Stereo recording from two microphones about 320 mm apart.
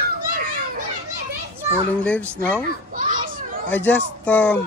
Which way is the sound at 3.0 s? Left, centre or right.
Right.